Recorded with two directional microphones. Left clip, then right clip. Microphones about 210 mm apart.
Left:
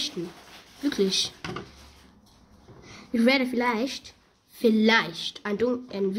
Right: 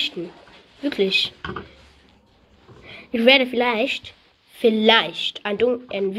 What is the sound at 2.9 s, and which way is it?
A woman's voice, 20° left (ahead or behind).